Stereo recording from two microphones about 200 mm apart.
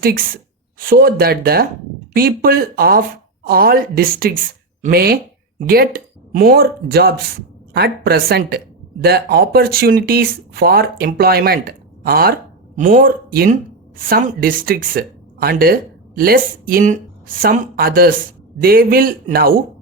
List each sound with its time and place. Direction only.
0.8 s speech: 45° right (ahead or behind)